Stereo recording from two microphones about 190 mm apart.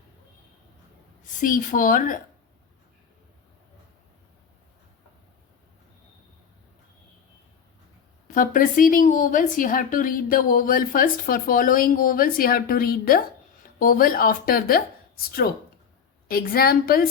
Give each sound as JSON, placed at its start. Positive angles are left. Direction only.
{"t": 1.4, "sound": "a woman's voice", "side_deg": 45}
{"t": 8.3, "sound": "a woman's voice", "side_deg": 45}
{"t": 16.3, "sound": "a woman's voice", "side_deg": 50}